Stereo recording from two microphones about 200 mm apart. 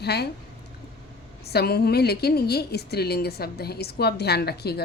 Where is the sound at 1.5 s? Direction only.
55° left (ahead or behind).